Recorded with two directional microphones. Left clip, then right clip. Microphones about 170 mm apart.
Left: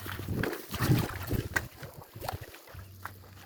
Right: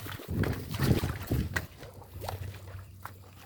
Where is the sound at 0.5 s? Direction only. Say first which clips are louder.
Even; 55° left (ahead or behind).